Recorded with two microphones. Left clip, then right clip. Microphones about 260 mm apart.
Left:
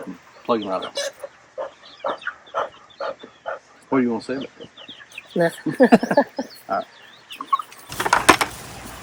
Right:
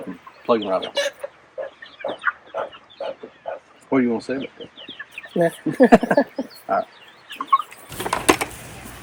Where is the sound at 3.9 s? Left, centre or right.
Centre.